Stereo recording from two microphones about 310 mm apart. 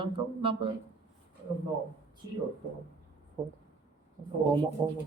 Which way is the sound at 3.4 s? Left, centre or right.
Centre.